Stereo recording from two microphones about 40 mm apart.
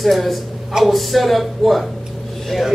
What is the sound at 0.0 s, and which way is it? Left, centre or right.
A man's voice, centre.